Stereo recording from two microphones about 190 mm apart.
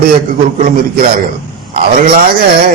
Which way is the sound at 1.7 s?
50° right (ahead or behind).